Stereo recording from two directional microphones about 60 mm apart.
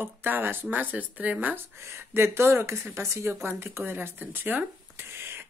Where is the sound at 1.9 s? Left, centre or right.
Right.